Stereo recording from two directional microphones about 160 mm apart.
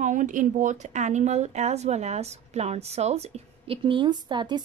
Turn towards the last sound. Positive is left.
turn(degrees=-30)  # may be behind; listen again after turning